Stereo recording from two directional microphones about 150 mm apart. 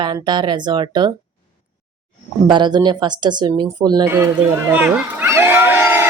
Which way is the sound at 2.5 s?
30° right (ahead or behind).